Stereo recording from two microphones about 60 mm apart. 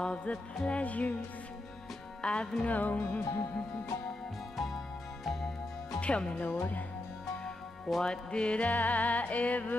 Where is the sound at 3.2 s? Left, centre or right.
Left.